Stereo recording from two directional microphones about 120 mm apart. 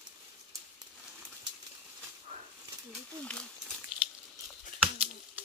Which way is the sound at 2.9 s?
5° left (ahead or behind).